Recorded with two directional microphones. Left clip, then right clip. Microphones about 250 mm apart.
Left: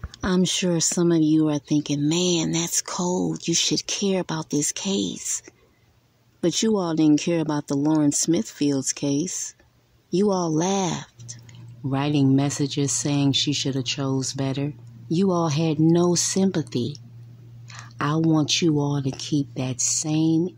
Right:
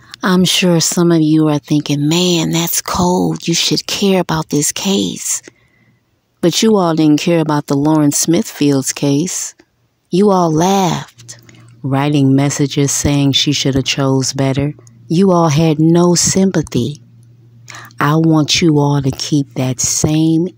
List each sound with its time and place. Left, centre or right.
0.1 s speech: right